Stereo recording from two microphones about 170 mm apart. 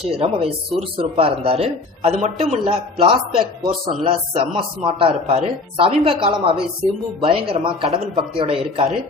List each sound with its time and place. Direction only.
0.1 s speech: 35° right (ahead or behind)